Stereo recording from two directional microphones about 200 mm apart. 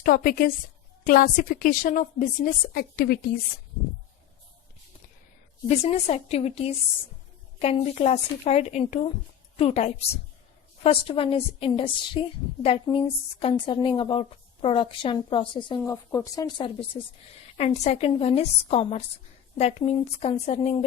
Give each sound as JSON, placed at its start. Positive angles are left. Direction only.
{"t": 0.0, "sound": "a woman's voice", "side_deg": 45}
{"t": 5.6, "sound": "a woman's voice", "side_deg": 35}